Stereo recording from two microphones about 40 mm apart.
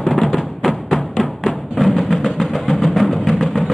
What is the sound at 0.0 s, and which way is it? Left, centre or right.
Music, centre.